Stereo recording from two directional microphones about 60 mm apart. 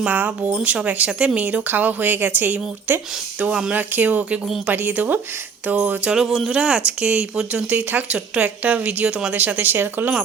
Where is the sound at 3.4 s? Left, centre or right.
Centre.